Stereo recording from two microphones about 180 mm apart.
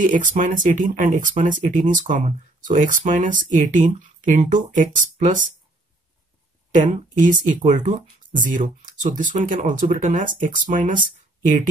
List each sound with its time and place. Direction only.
0.0 s speech: 45° right (ahead or behind)
6.8 s speech: 45° right (ahead or behind)